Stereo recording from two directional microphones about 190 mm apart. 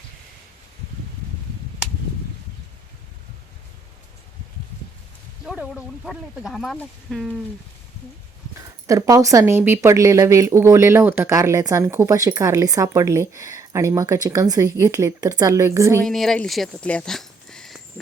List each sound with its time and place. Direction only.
5.5 s speech: 5° right (ahead or behind)
8.9 s speech: 20° right (ahead or behind)
16.0 s speech: centre (ahead or behind)